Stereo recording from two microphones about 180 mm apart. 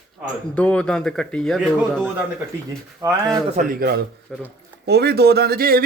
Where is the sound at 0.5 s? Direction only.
5° left (ahead or behind).